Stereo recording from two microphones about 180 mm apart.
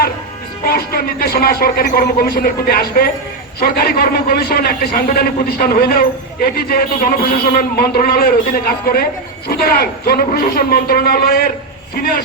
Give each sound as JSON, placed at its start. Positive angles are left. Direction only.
{"t": 0.6, "sound": "a man's voice", "side_deg": 60}